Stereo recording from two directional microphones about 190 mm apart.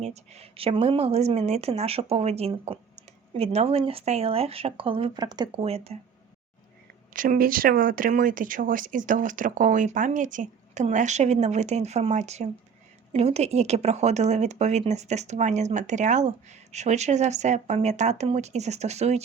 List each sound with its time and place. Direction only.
0.0 s a woman's voice: 35° right (ahead or behind)
7.1 s a woman's voice: 45° right (ahead or behind)